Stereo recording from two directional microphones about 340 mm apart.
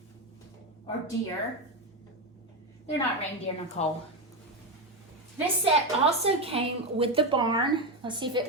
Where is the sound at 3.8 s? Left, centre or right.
Centre.